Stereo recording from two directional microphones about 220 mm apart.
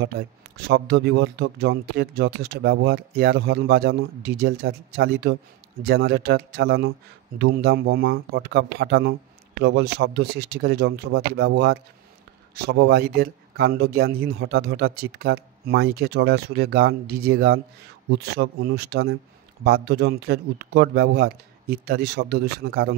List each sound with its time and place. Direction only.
0.7 s speech: 50° right (ahead or behind)
3.2 s speech: 45° right (ahead or behind)